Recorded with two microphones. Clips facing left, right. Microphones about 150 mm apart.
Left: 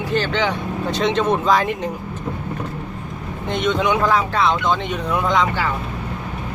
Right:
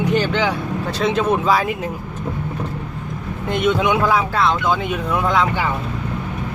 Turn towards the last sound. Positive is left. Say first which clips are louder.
# right 1 dB
turn(degrees=-5)  # may be behind; listen again after turning